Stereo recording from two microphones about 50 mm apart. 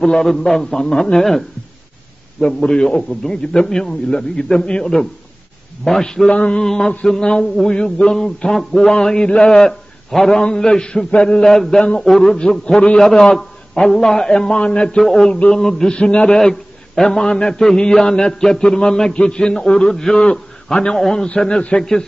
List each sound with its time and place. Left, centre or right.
0.0 s a man's voice: centre
2.4 s a man's voice: centre
6.3 s a man's voice: left
6.6 s a man's voice: centre
11.4 s a man's voice: centre
15.0 s a man's voice: centre
16.0 s a man's voice: left
16.3 s a man's voice: centre